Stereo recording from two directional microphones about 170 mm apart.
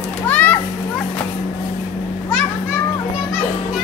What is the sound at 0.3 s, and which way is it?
Children playing, 10° left (ahead or behind).